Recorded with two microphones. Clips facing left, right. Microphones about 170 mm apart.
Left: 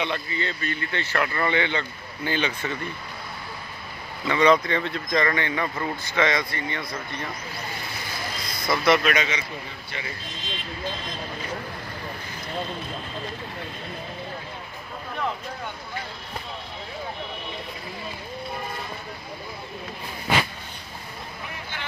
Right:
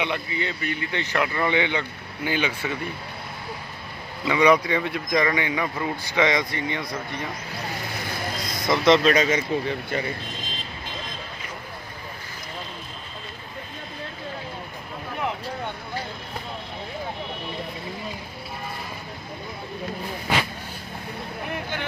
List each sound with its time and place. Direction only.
0.0 s speech: 15° right (ahead or behind)
4.3 s speech: 10° right (ahead or behind)
8.6 s speech: 20° right (ahead or behind)
9.1 s speech: 40° right (ahead or behind)